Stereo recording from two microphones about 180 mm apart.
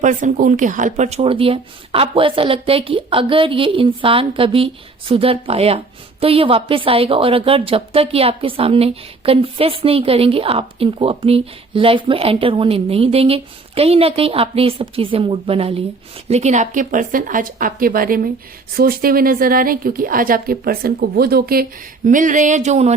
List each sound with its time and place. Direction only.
0.0 s speech: 45° right (ahead or behind)